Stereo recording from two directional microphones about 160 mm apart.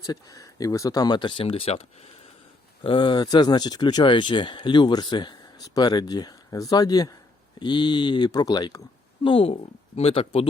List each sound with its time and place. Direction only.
0.0 s speech: 25° left (ahead or behind); by 2.0 s 40° left (ahead or behind)
2.8 s speech: 30° left (ahead or behind)